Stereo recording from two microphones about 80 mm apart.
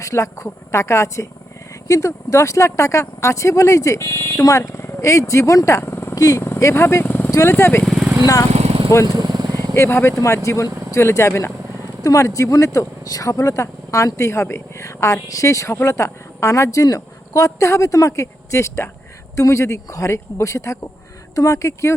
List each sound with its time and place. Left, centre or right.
0.0 s speech: left
6.1 s speech: left
6.4 s speech: left
7.3 s vehicle: left
7.5 s speech: left
9.0 s vehicle: right
9.6 s speech: left